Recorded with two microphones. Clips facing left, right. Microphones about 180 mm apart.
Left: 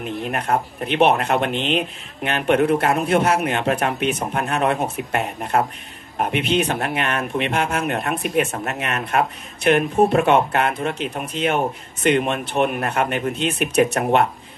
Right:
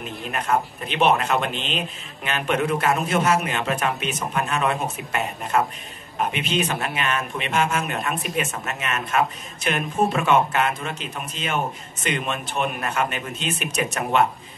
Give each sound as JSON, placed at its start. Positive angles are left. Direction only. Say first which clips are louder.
{"t": 0.2, "sound": "speech", "louder": "even", "side_deg": 60}